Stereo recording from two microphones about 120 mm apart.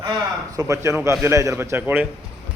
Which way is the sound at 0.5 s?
25° right (ahead or behind).